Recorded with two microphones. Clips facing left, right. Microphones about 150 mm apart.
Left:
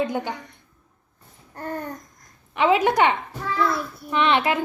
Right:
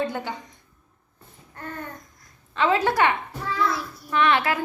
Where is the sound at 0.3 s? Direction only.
70° left (ahead or behind).